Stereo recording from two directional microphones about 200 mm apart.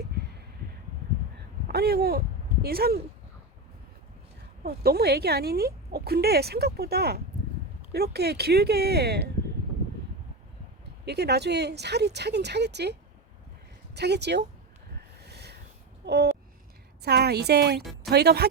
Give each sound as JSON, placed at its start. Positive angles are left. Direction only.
{"t": 1.6, "sound": "speech", "side_deg": -50}
{"t": 4.6, "sound": "speech", "side_deg": -50}
{"t": 11.0, "sound": "speech", "side_deg": -55}
{"t": 15.2, "sound": "a sound", "side_deg": -55}
{"t": 16.0, "sound": "speech", "side_deg": -55}
{"t": 17.7, "sound": "speech", "side_deg": 0}
{"t": 18.1, "sound": "speech", "side_deg": -55}